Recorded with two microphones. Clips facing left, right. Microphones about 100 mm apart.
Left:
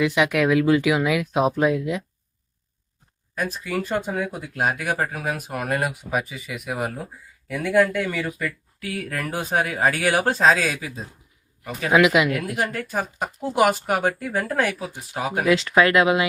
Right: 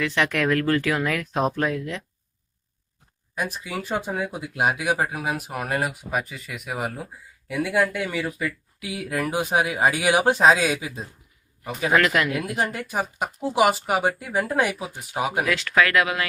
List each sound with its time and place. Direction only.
0.0 s speech: 10° left (ahead or behind)
3.3 s a man's voice: 10° right (ahead or behind)
11.9 s speech: 10° left (ahead or behind)
12.5 s speech: 15° right (ahead or behind)
15.4 s speech: 20° left (ahead or behind)